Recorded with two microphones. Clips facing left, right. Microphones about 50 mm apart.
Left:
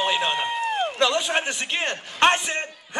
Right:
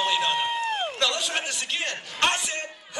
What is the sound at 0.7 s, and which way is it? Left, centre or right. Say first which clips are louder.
Run: left 3 dB; centre.